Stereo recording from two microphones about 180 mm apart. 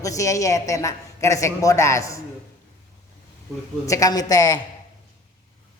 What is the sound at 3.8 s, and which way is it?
Speech, 20° left (ahead or behind).